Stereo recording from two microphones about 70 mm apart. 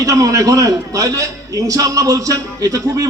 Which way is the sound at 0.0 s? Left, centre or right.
Right.